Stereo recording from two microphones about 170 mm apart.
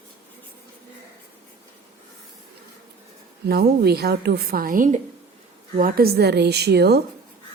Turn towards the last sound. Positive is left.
turn(degrees=-75)  # may be behind; listen again after turning